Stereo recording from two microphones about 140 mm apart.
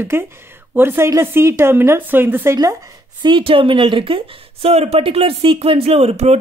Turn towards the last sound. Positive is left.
turn(degrees=-50)  # may be behind; listen again after turning